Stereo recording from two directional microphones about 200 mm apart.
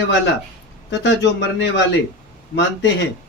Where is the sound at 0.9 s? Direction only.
65° left (ahead or behind).